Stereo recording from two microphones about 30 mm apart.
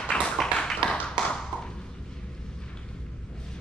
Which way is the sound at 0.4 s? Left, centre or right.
Centre.